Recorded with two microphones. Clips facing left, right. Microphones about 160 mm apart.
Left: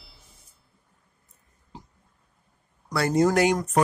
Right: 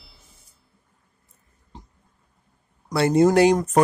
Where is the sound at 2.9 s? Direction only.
25° right (ahead or behind).